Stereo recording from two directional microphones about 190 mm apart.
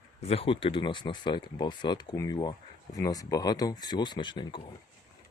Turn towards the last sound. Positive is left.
turn(degrees=25)  # may be behind; listen again after turning